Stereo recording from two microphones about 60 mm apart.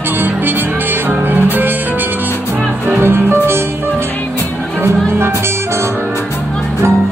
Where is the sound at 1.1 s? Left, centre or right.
Right.